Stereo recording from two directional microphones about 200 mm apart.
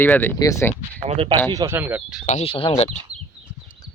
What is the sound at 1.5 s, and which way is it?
Speech, 15° right (ahead or behind).